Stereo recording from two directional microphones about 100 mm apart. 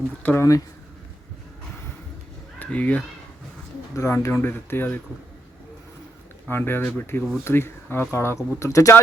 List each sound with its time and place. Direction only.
0.2 s speech: 15° left (ahead or behind)
2.6 s speech: 15° left (ahead or behind)
3.9 s speech: 30° left (ahead or behind)
6.5 s speech: 20° left (ahead or behind)